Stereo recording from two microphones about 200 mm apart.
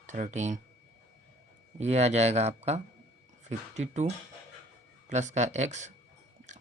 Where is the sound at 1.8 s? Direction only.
35° right (ahead or behind).